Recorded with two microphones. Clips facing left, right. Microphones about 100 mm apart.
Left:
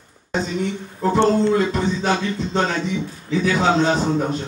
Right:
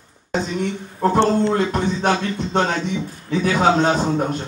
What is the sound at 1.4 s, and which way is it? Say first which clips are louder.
Beatboxing: left 1 dB; 55° right (ahead or behind).